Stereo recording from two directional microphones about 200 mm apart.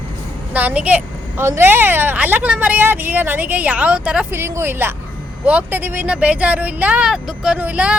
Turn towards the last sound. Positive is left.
turn(degrees=-5)  # may be behind; listen again after turning